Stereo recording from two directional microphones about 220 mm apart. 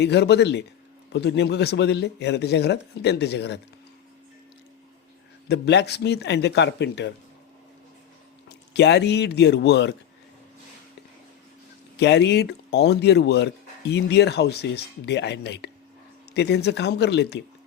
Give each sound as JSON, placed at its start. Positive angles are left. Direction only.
{"t": 0.0, "sound": "speech", "side_deg": 50}
{"t": 5.5, "sound": "speech", "side_deg": 50}
{"t": 8.4, "sound": "speech", "side_deg": 50}
{"t": 11.9, "sound": "speech", "side_deg": 50}